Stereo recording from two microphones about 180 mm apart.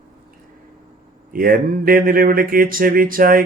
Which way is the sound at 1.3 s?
50° right (ahead or behind).